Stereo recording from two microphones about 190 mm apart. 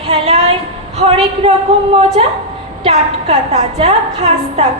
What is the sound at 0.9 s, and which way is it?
Speech, 35° right (ahead or behind).